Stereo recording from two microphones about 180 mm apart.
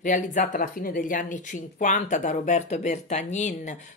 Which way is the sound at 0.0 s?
45° left (ahead or behind).